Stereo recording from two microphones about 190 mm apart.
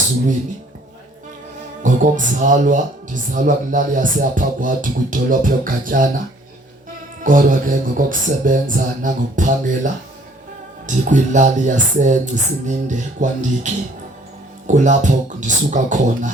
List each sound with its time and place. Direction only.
1.8 s speech: 40° right (ahead or behind)
7.3 s speech: 45° right (ahead or behind)
14.7 s speech: 40° right (ahead or behind)